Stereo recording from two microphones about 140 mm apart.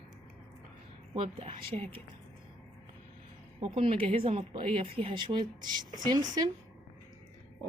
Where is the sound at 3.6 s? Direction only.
40° right (ahead or behind).